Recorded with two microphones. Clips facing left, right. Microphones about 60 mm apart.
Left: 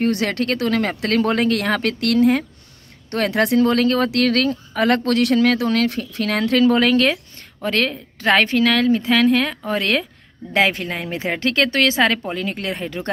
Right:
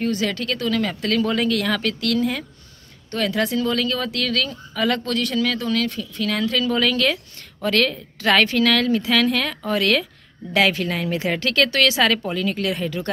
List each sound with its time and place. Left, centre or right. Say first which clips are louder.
0.0 s speech: left 3 dB; left
5.9 s speech: left 3 dB; left
7.6 s a woman's voice: right 1 dB; left